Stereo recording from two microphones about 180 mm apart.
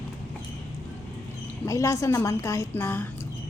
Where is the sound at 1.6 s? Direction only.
15° left (ahead or behind).